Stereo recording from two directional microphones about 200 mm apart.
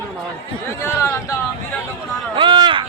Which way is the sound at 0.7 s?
10° left (ahead or behind).